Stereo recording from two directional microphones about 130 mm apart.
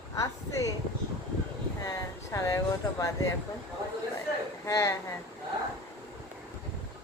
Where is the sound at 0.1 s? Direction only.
25° left (ahead or behind).